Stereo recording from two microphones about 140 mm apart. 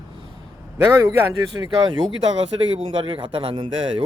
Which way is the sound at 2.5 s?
40° right (ahead or behind).